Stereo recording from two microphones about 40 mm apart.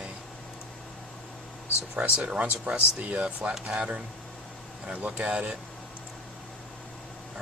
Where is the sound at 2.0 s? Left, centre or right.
Right.